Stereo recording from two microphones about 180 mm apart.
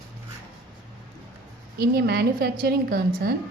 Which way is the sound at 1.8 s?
60° right (ahead or behind).